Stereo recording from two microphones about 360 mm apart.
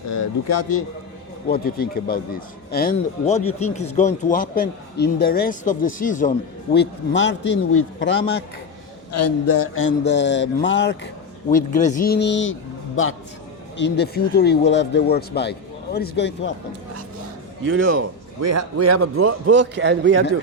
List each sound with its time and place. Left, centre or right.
0.4 s a man's voice: left
1.5 s speech: left
9.1 s speech: left
13.7 s speech: left
17.7 s a man's voice: right